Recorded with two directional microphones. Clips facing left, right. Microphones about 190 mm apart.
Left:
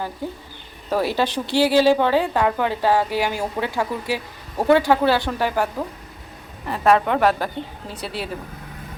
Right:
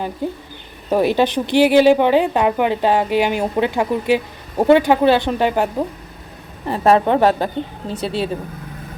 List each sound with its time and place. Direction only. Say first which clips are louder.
0.9 s speech: right 5 dB; 20° right (ahead or behind)